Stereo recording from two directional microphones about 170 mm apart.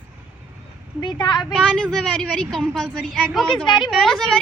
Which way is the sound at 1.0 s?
25° left (ahead or behind).